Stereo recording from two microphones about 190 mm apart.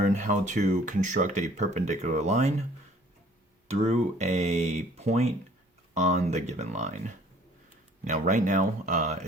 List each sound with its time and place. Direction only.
0.0 s speech: 40° right (ahead or behind)
3.8 s speech: 35° right (ahead or behind)